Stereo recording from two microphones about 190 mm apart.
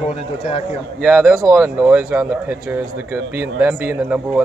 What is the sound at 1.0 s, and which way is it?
A man's voice, centre (ahead or behind).